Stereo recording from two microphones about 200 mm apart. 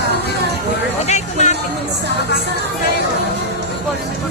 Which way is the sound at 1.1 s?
35° left (ahead or behind).